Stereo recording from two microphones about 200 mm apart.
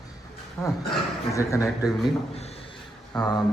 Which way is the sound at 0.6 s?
15° left (ahead or behind).